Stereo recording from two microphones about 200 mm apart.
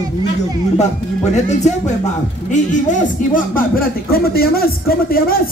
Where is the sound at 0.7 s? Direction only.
35° left (ahead or behind).